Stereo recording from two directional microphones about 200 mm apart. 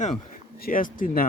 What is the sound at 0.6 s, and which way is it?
Speech, 45° left (ahead or behind).